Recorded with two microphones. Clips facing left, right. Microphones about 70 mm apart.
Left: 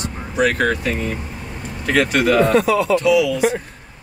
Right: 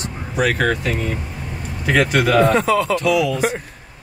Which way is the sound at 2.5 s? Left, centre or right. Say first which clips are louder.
Left 1 dB; right.